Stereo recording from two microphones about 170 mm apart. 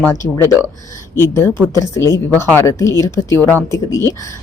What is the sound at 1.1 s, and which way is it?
A woman's voice, 15° left (ahead or behind).